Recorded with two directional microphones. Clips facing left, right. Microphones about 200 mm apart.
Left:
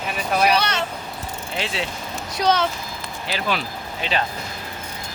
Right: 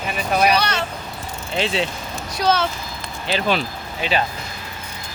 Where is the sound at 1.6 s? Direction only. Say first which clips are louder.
Right 6 dB; 25° right (ahead or behind).